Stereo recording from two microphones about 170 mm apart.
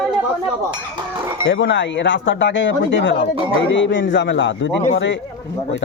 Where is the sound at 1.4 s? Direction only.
90° left.